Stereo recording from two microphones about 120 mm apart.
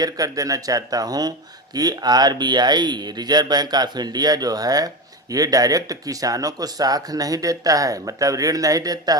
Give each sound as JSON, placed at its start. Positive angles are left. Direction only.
{"t": 0.0, "sound": "speech", "side_deg": -30}